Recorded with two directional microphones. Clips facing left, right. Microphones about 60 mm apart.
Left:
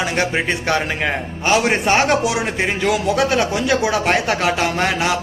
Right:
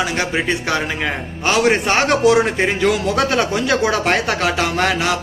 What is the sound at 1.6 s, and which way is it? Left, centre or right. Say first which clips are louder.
Speech: right 1 dB; centre.